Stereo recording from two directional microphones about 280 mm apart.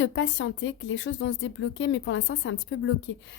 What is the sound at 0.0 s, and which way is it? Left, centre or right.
Speech, left.